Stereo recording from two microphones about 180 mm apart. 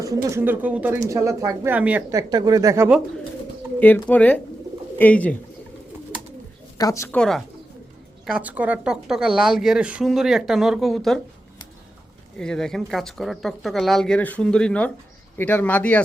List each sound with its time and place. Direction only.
0.0 s speech: 20° right (ahead or behind)
3.8 s speech: 10° left (ahead or behind)
6.7 s speech: 20° left (ahead or behind)
7.2 s speech: centre (ahead or behind)
12.4 s speech: 5° left (ahead or behind)